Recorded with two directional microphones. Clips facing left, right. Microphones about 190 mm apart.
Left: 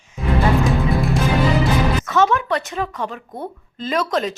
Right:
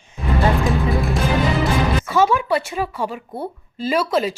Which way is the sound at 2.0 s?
10° right (ahead or behind).